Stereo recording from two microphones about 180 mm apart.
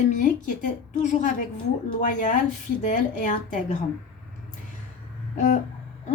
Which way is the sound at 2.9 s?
45° left (ahead or behind).